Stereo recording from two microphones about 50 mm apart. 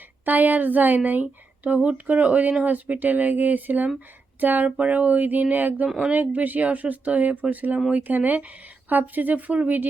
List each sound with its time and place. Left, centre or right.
0.3 s speech: right